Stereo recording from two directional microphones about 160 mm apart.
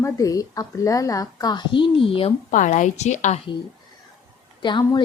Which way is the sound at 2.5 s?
50° left (ahead or behind).